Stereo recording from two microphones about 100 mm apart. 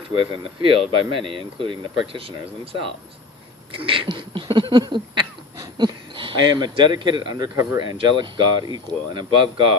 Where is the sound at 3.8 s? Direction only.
60° right (ahead or behind).